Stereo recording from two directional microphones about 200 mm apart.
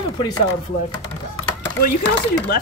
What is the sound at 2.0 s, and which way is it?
Speech, 60° left (ahead or behind).